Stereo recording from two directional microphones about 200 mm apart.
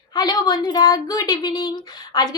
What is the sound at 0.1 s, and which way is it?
A woman's voice, 20° left (ahead or behind).